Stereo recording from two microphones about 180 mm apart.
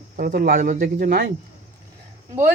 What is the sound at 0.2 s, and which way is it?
Speech, 55° right (ahead or behind).